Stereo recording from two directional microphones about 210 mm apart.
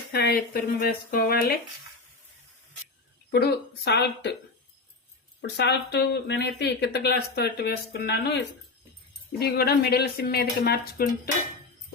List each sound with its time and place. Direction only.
0.1 s speech: 50° left (ahead or behind)
3.3 s speech: 50° left (ahead or behind)
5.4 s speech: 55° left (ahead or behind)